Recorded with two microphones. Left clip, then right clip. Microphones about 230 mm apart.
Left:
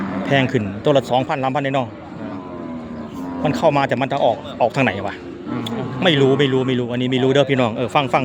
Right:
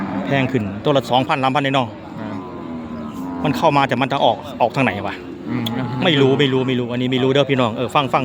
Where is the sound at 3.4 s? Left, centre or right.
Centre.